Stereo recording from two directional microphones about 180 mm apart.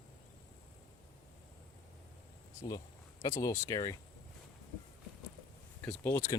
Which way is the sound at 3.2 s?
15° left (ahead or behind).